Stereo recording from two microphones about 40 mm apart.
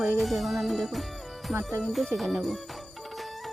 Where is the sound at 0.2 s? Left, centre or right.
Centre.